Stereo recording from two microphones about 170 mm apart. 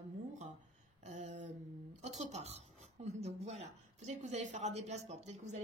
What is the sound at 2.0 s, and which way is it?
A woman's voice, 40° right (ahead or behind).